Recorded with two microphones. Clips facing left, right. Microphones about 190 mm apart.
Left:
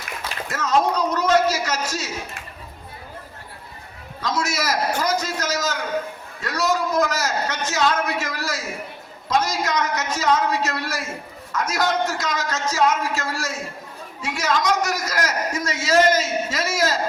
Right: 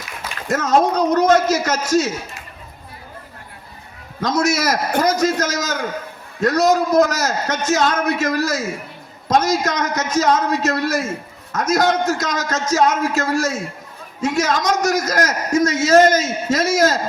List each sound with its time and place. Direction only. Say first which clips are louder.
0.4 s a man's voice: right 5 dB; 45° right (ahead or behind)
4.2 s a man's voice: right 6 dB; 45° right (ahead or behind)